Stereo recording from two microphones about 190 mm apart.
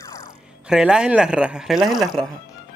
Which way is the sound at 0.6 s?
5° right (ahead or behind).